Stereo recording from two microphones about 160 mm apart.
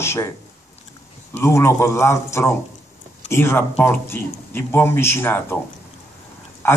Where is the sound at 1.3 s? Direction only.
15° left (ahead or behind).